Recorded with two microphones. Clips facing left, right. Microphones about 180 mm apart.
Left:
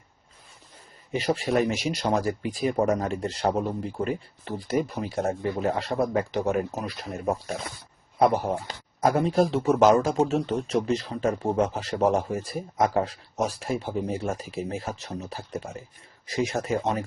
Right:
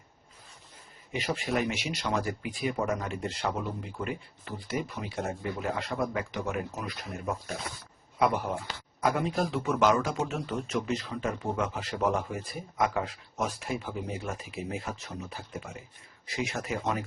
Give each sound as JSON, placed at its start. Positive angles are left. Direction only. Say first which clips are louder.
{"t": 1.1, "sound": "speech", "louder": "left 6 dB", "side_deg": 35}
{"t": 8.4, "sound": "speech", "louder": "left 5 dB", "side_deg": 40}
{"t": 10.3, "sound": "speech", "louder": "left 7 dB", "side_deg": 30}